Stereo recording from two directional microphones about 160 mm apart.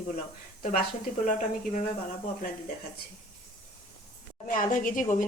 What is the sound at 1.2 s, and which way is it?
Speech, 50° left (ahead or behind).